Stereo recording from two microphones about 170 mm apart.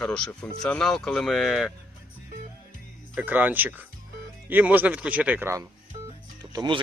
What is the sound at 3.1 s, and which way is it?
Speech, 10° right (ahead or behind).